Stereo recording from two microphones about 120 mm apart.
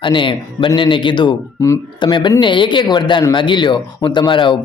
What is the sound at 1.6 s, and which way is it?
Speech, 25° left (ahead or behind).